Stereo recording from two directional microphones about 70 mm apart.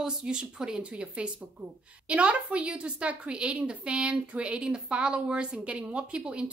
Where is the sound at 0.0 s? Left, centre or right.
Centre.